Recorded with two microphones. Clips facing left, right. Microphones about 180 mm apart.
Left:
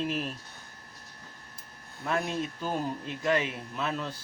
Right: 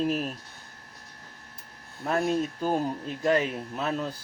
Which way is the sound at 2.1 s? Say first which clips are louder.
Right 5 dB; 35° right (ahead or behind).